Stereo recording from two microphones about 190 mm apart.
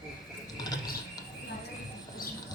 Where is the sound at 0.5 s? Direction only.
20° left (ahead or behind).